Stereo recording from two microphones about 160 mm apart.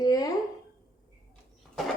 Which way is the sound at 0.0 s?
25° left (ahead or behind).